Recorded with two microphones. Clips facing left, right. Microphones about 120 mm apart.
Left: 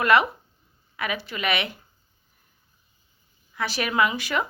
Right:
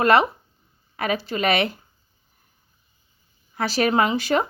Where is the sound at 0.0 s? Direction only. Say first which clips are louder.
Right 3 dB; 30° right (ahead or behind).